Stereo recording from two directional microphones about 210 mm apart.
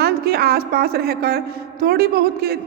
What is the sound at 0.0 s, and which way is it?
A man's voice, 50° right (ahead or behind).